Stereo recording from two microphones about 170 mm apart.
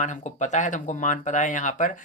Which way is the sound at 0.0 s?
45° left (ahead or behind).